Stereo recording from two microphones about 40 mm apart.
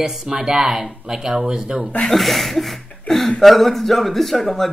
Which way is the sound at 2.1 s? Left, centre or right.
Centre.